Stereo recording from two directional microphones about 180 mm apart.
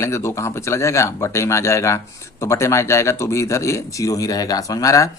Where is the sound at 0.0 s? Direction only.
15° left (ahead or behind).